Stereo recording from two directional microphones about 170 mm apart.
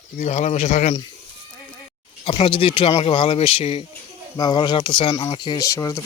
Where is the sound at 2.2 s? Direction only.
30° left (ahead or behind).